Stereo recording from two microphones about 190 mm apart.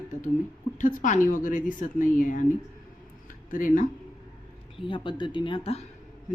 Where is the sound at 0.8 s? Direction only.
40° left (ahead or behind).